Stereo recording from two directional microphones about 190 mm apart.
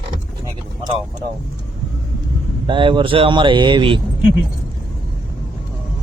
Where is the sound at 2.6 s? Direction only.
25° right (ahead or behind).